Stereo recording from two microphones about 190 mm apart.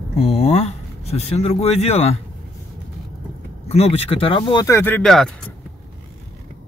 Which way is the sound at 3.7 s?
35° left (ahead or behind).